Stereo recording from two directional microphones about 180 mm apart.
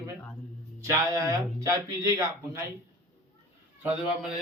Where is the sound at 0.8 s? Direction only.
20° right (ahead or behind).